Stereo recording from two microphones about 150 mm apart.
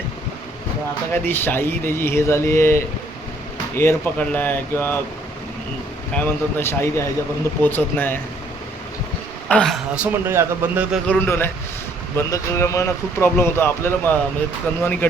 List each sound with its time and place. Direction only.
1.2 s speech: 15° left (ahead or behind)
6.1 s speech: 15° left (ahead or behind)
9.5 s speech: 5° left (ahead or behind); by 10.8 s 15° right (ahead or behind)
11.0 s speech: 10° left (ahead or behind)